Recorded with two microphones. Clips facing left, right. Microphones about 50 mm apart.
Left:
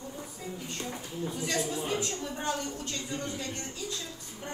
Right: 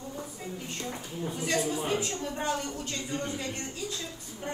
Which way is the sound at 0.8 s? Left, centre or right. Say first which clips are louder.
Right 1 dB; right.